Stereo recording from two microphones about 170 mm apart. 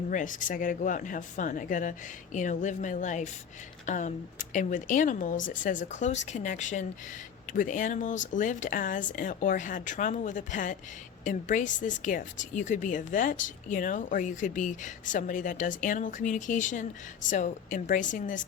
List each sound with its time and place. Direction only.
0.1 s speech: 50° left (ahead or behind)